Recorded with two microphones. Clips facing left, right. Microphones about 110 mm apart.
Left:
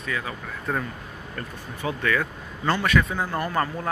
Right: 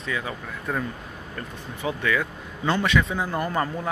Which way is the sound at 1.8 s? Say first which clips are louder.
Even; 15° right (ahead or behind).